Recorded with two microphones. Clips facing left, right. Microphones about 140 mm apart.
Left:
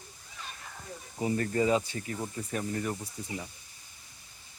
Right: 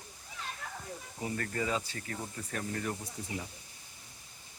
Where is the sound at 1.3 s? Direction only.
25° left (ahead or behind).